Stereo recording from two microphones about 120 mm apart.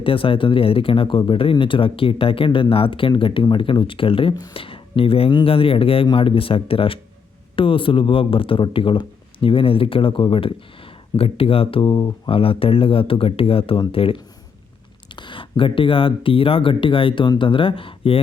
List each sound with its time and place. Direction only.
0.0 s speech: 45° left (ahead or behind)
12.3 s speech: 50° left (ahead or behind)